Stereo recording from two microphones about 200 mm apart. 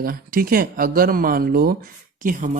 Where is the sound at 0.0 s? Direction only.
45° right (ahead or behind).